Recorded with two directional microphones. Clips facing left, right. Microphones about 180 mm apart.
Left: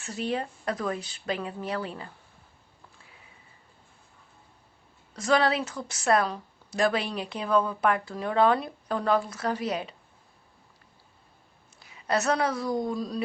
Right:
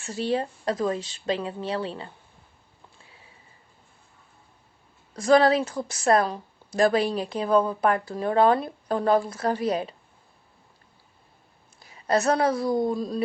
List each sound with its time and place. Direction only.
0.0 s speech: 30° right (ahead or behind)
5.1 s a woman's voice: 35° right (ahead or behind)
11.9 s a woman's voice: 35° right (ahead or behind)